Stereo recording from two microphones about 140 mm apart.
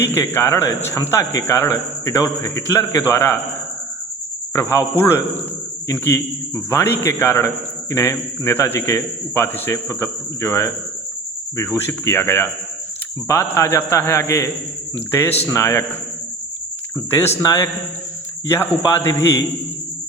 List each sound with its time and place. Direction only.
0.0 s a man's voice: 15° left (ahead or behind)
4.5 s a man's voice: 20° left (ahead or behind)
11.9 s a man's voice: 15° left (ahead or behind)
15.4 s a man's voice: 20° left (ahead or behind)
17.1 s a man's voice: 15° left (ahead or behind)